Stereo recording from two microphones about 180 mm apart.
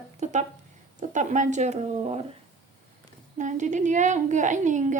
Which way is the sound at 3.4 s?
40° right (ahead or behind).